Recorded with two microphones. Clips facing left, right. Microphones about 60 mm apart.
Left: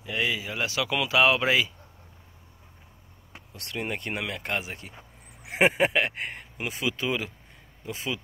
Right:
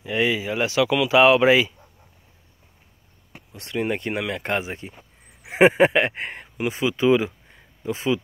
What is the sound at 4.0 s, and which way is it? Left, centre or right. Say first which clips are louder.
Speech: right 6 dB; centre.